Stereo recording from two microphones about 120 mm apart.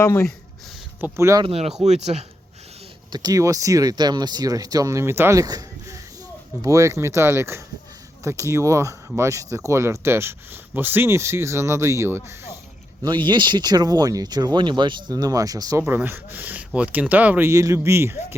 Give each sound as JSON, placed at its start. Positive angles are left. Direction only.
{"t": 0.0, "sound": "speech", "side_deg": 20}
{"t": 1.0, "sound": "speech", "side_deg": -25}
{"t": 1.5, "sound": "speech", "side_deg": -55}
{"t": 1.8, "sound": "speech", "side_deg": -65}
{"t": 3.1, "sound": "speech", "side_deg": -35}
{"t": 13.2, "sound": "speech", "side_deg": -40}
{"t": 15.9, "sound": "speech", "side_deg": -15}